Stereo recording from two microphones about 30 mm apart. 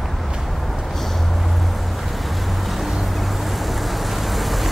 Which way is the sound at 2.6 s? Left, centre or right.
Centre.